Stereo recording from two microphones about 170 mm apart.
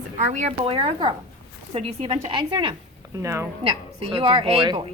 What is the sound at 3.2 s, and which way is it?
Speech, 15° right (ahead or behind).